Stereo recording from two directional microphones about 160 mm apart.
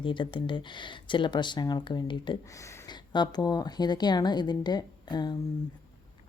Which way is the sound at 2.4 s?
20° left (ahead or behind).